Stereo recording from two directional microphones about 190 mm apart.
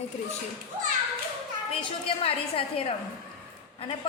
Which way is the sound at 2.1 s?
30° left (ahead or behind).